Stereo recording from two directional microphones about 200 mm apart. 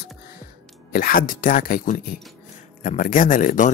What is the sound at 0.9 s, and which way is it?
Speech, 45° left (ahead or behind).